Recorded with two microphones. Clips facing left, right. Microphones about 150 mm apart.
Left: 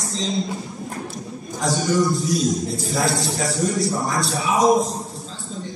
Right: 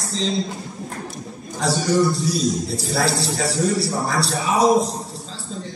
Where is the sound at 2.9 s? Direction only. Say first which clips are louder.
Right 1 dB; 35° right (ahead or behind).